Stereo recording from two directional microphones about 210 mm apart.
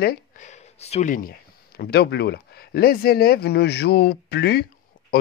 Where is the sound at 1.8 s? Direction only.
50° left (ahead or behind).